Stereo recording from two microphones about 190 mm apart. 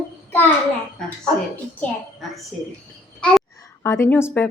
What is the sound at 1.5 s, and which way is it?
Speech, 5° left (ahead or behind).